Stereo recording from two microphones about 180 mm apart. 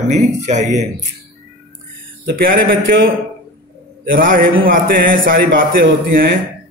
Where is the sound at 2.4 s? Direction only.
55° right (ahead or behind).